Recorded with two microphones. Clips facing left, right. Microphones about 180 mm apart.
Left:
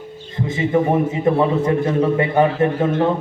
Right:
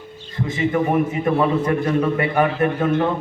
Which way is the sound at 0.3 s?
25° left (ahead or behind).